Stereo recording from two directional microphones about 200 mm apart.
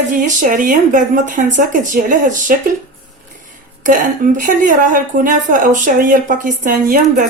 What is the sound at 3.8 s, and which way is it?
A woman's voice, 40° right (ahead or behind).